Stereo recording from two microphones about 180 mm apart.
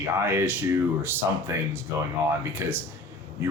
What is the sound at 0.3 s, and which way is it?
Speech, 15° right (ahead or behind).